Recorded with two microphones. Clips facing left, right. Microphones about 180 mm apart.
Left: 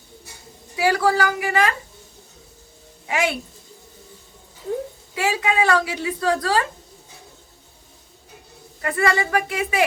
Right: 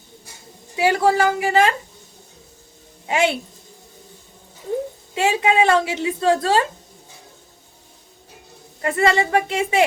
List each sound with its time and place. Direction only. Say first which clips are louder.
0.8 s a woman's voice: right 2 dB; 25° right (ahead or behind)
3.1 s a woman's voice: right 3 dB; 25° right (ahead or behind)
5.1 s a woman's voice: right 4 dB; 25° right (ahead or behind)
8.8 s a woman's voice: right 3 dB; 25° right (ahead or behind)